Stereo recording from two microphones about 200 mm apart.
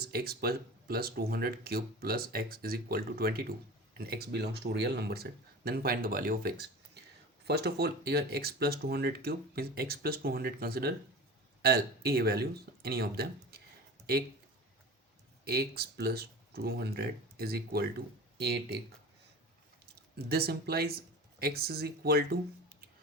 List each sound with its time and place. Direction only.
0.0 s speech: 50° right (ahead or behind)
15.4 s speech: 50° right (ahead or behind)
19.8 s speech: 50° right (ahead or behind)